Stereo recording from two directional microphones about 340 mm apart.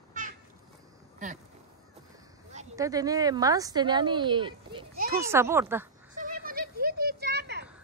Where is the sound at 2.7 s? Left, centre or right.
Centre.